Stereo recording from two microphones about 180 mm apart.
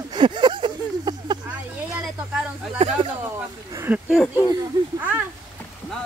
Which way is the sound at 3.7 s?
15° right (ahead or behind).